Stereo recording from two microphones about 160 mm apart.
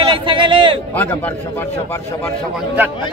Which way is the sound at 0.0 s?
30° right (ahead or behind).